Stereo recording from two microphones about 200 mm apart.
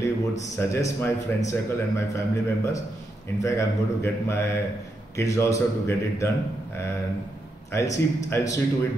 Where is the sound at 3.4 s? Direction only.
15° left (ahead or behind).